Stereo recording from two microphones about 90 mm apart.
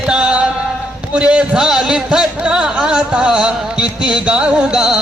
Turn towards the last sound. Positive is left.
turn(degrees=-5)  # may be behind; listen again after turning